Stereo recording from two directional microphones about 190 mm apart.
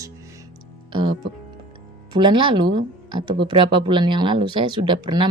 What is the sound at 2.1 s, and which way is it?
Speech, 25° right (ahead or behind).